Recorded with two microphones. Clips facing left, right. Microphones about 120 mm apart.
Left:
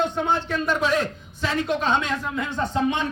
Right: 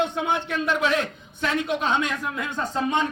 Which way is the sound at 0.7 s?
40° left (ahead or behind).